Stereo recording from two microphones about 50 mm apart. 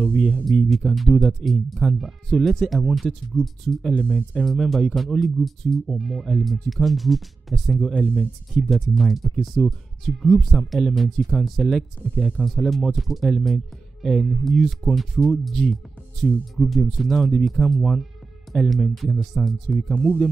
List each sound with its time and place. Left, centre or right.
0.5 s speech: centre
8.0 s speech: left
8.5 s speech: centre